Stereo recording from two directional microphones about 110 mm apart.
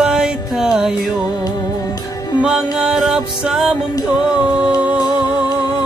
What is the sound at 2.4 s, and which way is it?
Music, 5° right (ahead or behind).